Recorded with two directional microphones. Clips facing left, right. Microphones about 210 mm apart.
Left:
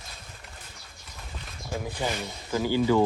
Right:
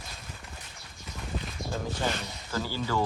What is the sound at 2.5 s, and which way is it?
Speech, 15° left (ahead or behind).